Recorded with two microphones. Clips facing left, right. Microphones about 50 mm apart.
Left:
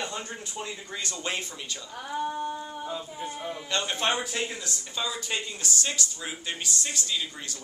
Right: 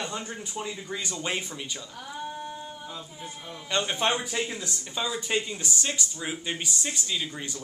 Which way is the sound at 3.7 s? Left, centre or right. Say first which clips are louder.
Right 2 dB; centre.